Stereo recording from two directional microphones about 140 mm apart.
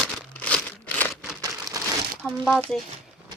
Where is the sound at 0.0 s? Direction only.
5° left (ahead or behind).